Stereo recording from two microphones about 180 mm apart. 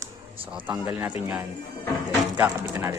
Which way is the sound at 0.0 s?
30° right (ahead or behind).